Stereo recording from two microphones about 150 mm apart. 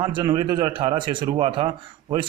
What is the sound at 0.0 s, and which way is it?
A man's voice, 30° right (ahead or behind).